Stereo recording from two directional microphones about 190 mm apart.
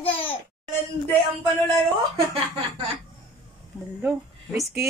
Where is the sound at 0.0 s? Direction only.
30° left (ahead or behind).